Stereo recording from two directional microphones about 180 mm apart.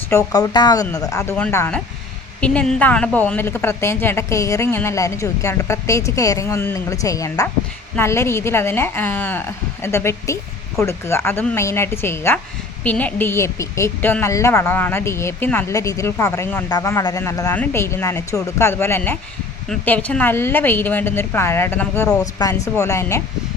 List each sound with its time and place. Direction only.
0.1 s a woman's voice: 20° left (ahead or behind)